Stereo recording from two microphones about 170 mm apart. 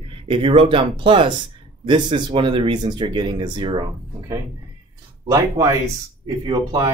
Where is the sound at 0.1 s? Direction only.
30° right (ahead or behind).